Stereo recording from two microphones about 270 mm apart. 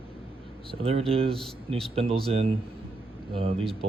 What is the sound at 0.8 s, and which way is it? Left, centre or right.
Speech, right.